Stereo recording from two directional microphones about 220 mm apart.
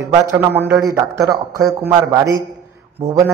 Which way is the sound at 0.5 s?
10° right (ahead or behind).